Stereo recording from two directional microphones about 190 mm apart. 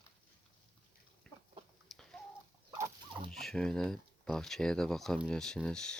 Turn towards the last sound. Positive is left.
turn(degrees=5)  # may be behind; listen again after turning